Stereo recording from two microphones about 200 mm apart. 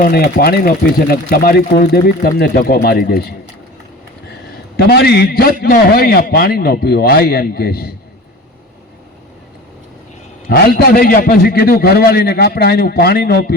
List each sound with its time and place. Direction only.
0.0 s speech: 50° left (ahead or behind)
4.8 s speech: 55° left (ahead or behind)
10.5 s speech: 50° left (ahead or behind)